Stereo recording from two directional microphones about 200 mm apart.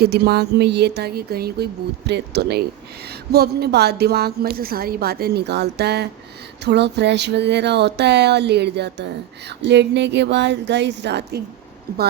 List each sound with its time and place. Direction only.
0.0 s a woman's voice: 50° right (ahead or behind)